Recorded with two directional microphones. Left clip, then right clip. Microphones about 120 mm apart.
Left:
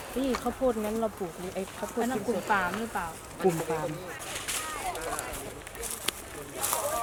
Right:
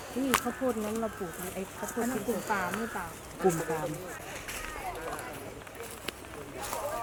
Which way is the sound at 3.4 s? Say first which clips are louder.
Left 1 dB; 20° left (ahead or behind).